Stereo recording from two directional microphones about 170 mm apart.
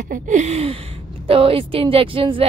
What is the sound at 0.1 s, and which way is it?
Speech, 45° right (ahead or behind).